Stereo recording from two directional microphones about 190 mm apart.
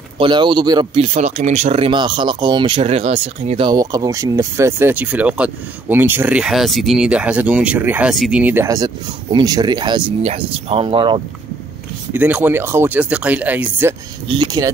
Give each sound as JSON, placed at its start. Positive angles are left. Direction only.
{"t": 0.2, "sound": "speech", "side_deg": -25}
{"t": 1.0, "sound": "speech", "side_deg": -35}
{"t": 12.1, "sound": "speech", "side_deg": -10}
{"t": 14.2, "sound": "speech", "side_deg": -25}